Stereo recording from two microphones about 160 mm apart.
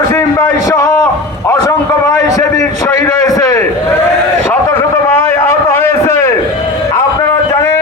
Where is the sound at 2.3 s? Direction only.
20° left (ahead or behind).